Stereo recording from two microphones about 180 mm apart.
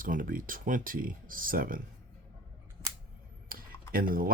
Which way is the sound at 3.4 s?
55° right (ahead or behind).